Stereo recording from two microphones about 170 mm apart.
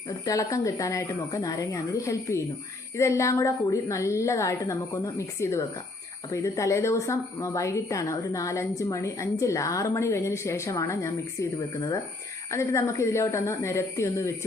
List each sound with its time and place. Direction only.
0.3 s a woman's voice: 20° left (ahead or behind)